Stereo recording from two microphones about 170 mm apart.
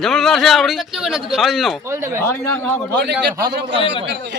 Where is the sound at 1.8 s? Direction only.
15° right (ahead or behind).